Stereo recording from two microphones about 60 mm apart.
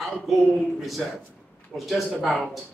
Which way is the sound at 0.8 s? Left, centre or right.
Centre.